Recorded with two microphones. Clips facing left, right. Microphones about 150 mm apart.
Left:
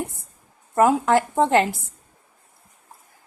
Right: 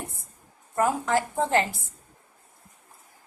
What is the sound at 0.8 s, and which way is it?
A woman's voice, 70° left (ahead or behind).